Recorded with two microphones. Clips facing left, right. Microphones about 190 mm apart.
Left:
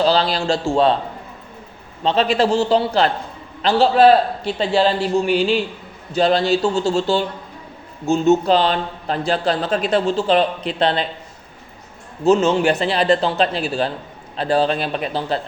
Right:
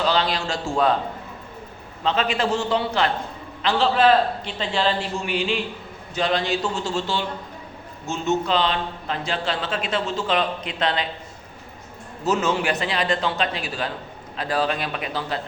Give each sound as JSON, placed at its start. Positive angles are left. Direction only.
{"t": 0.0, "sound": "a man's voice", "side_deg": 35}
{"t": 2.0, "sound": "a man's voice", "side_deg": 35}
{"t": 12.2, "sound": "a man's voice", "side_deg": 25}